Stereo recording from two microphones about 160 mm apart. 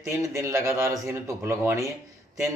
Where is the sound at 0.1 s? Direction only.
15° right (ahead or behind).